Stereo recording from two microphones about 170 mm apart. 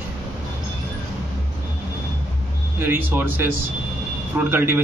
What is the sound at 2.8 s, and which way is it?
Speech, 10° right (ahead or behind).